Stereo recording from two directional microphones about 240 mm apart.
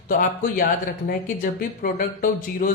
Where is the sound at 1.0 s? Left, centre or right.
Left.